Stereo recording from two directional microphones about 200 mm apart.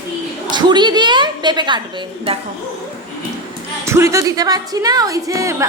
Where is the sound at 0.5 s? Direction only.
20° right (ahead or behind).